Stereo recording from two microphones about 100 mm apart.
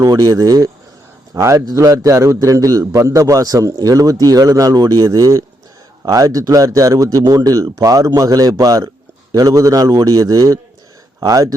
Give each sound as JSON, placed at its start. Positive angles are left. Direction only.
{"t": 0.0, "sound": "a man's voice", "side_deg": -35}